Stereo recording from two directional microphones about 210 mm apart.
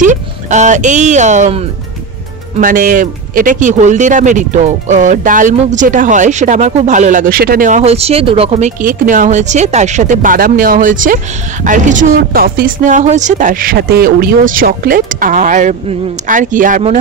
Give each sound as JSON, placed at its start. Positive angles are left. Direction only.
{"t": 0.0, "sound": "speech", "side_deg": -35}
{"t": 2.6, "sound": "speech", "side_deg": -40}